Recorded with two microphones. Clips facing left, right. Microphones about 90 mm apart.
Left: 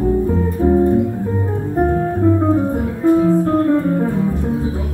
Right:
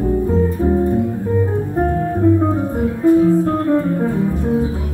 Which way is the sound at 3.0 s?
20° left (ahead or behind).